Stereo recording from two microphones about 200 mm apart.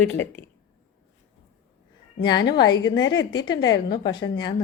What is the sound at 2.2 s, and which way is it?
A woman's voice, 20° left (ahead or behind).